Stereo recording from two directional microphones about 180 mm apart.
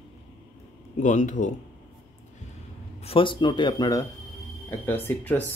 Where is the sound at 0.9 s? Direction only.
45° left (ahead or behind).